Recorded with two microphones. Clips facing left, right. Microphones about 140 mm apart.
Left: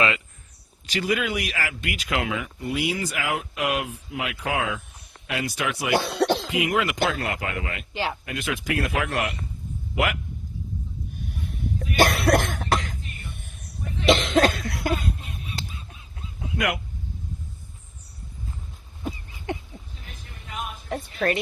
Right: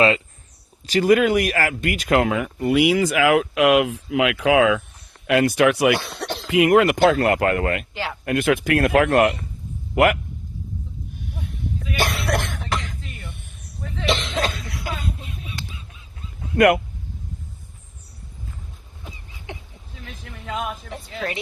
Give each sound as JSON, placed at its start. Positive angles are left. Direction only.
{"t": 0.9, "sound": "speech", "side_deg": -45}
{"t": 2.6, "sound": "speech", "side_deg": -85}
{"t": 5.2, "sound": "speech", "side_deg": -60}
{"t": 6.1, "sound": "cough", "side_deg": 75}
{"t": 6.5, "sound": "speech", "side_deg": -55}
{"t": 11.9, "sound": "cough", "side_deg": 50}
{"t": 14.0, "sound": "cough", "side_deg": 50}
{"t": 16.6, "sound": "speech", "side_deg": -55}
{"t": 20.1, "sound": "a sound", "side_deg": -90}